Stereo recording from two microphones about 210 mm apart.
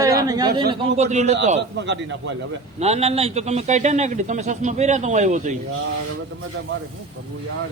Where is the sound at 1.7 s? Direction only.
55° right (ahead or behind).